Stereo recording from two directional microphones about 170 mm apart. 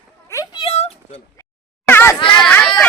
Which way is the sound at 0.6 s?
40° left (ahead or behind).